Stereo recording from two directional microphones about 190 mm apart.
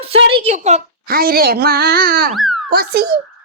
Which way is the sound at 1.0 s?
50° right (ahead or behind).